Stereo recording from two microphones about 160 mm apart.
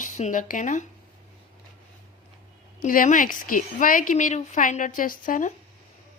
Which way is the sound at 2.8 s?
55° left (ahead or behind).